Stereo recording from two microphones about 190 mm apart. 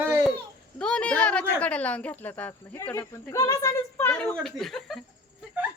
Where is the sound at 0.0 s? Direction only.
15° right (ahead or behind).